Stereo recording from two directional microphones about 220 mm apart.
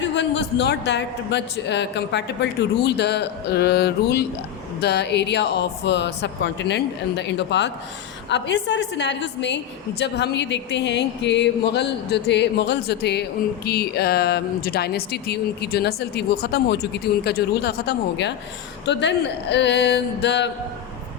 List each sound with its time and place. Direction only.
0.0 s speech: 55° left (ahead or behind)